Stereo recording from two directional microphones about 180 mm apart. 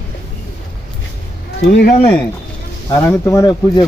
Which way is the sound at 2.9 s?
15° left (ahead or behind).